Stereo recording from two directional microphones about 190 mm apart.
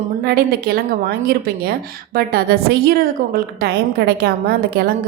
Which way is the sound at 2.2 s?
55° right (ahead or behind).